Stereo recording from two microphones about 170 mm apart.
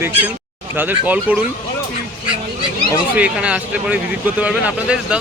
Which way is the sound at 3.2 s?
5° right (ahead or behind).